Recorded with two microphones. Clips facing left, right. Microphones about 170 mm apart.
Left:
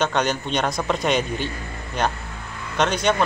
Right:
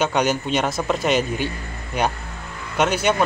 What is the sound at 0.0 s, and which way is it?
Speech, 10° right (ahead or behind).